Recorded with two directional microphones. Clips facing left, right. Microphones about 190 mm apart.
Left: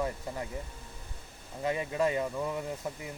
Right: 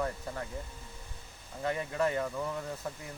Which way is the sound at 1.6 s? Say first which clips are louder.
Left 2 dB; 15° left (ahead or behind).